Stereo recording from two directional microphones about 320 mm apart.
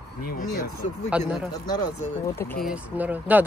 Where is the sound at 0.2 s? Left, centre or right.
Left.